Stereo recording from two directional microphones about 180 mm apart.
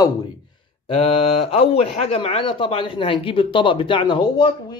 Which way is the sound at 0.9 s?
30° left (ahead or behind).